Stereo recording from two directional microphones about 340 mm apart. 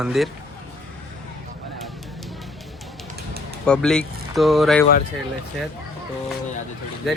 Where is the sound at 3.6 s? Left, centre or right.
Centre.